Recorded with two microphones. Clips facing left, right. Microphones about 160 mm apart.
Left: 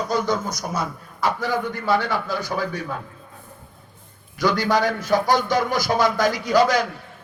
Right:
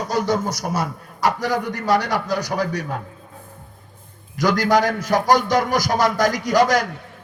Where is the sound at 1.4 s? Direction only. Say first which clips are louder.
Right 2 dB; 40° right (ahead or behind).